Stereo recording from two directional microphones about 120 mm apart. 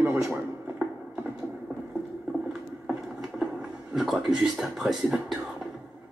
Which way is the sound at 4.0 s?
Centre (ahead or behind).